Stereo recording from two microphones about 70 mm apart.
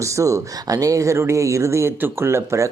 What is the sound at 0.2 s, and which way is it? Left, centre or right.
Speech, right.